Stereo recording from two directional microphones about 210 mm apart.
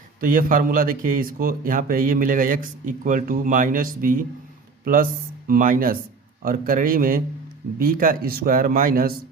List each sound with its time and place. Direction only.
0.2 s speech: 40° right (ahead or behind)
5.5 s speech: 40° right (ahead or behind)